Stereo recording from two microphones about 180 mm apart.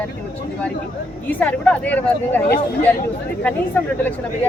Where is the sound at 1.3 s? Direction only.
10° left (ahead or behind).